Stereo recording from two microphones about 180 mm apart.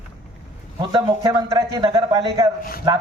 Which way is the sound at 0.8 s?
25° right (ahead or behind).